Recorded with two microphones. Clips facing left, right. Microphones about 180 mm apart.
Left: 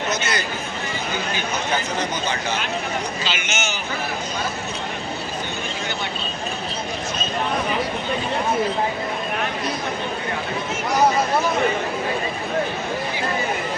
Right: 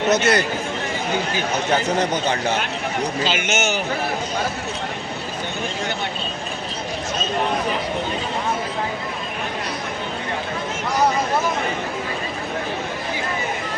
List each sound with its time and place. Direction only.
0.1 s a man's voice: 60° right (ahead or behind)
3.2 s a man's voice: 50° right (ahead or behind)